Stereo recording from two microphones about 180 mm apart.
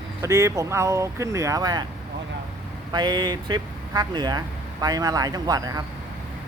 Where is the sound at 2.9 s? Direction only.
25° right (ahead or behind).